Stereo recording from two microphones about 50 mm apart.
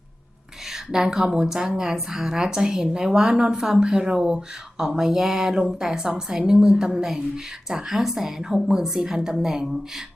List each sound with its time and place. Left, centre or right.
0.7 s a woman's voice: centre